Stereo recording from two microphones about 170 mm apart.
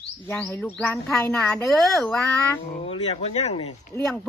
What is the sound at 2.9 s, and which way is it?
Speech, 40° left (ahead or behind).